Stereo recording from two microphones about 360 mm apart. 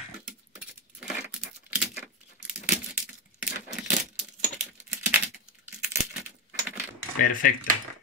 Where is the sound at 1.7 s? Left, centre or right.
Centre.